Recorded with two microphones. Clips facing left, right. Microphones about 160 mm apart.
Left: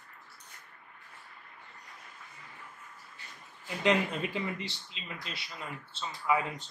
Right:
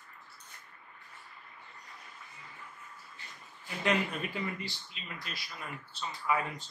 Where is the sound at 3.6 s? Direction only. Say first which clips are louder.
Left 3 dB; 20° left (ahead or behind).